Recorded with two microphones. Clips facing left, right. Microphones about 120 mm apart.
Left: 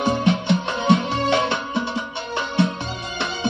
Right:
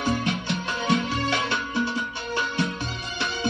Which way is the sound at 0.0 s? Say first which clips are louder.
Left 6 dB; 25° left (ahead or behind).